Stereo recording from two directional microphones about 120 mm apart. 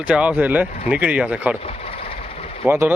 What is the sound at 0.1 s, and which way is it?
Speech, 10° right (ahead or behind).